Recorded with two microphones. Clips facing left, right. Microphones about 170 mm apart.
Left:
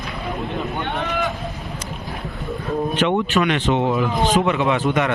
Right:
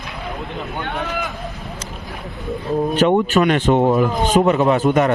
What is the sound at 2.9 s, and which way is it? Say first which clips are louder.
Speech: right 5 dB; 45° right (ahead or behind).